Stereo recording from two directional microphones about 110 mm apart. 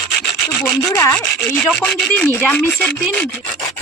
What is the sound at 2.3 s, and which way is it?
Speech, 15° left (ahead or behind).